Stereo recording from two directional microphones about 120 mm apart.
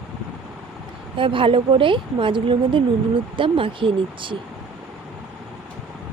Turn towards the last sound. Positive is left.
turn(degrees=-45)  # may be behind; listen again after turning